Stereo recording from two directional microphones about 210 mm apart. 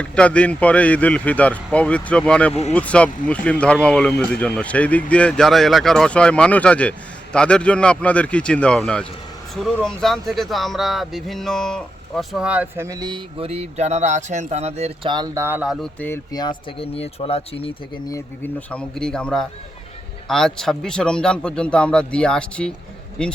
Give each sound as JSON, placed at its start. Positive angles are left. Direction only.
{"t": 0.0, "sound": "speech", "side_deg": 5}
{"t": 2.5, "sound": "speech", "side_deg": 30}
{"t": 2.7, "sound": "speech", "side_deg": 5}
{"t": 16.0, "sound": "speech", "side_deg": 10}
{"t": 18.1, "sound": "speech", "side_deg": 10}